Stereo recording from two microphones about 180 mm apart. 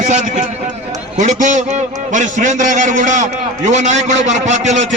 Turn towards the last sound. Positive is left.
turn(degrees=-40)  # may be behind; listen again after turning